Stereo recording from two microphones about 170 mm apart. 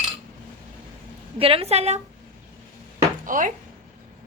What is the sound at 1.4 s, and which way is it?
Speech, 35° right (ahead or behind).